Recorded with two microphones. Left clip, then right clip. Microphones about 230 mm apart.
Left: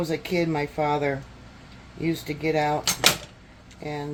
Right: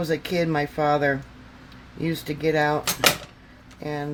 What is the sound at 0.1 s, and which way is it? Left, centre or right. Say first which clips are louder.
Speech: right 2 dB; right.